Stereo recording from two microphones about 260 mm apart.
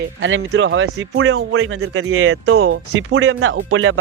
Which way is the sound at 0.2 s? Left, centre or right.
Right.